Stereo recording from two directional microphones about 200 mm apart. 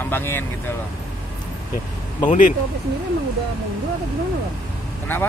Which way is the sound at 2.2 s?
40° left (ahead or behind).